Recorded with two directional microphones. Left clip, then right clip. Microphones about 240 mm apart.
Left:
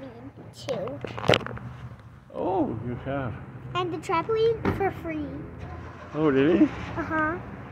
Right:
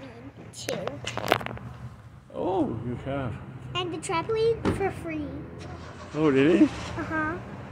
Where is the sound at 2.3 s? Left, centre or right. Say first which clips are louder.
Left 1 dB; centre.